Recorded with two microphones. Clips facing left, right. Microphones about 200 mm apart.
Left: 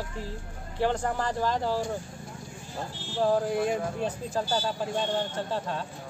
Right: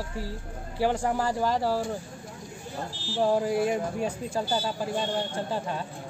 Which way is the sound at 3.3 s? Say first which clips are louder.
Right 1 dB; 5° right (ahead or behind).